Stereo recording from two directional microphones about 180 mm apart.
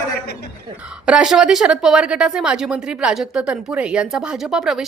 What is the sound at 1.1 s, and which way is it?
A woman's voice, 5° right (ahead or behind).